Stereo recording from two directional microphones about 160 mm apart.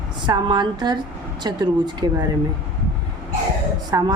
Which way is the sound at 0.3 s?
30° right (ahead or behind).